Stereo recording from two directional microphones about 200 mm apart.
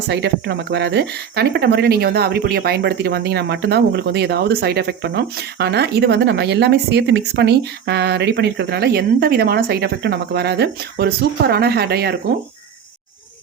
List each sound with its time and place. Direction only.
0.1 s speech: 60° right (ahead or behind)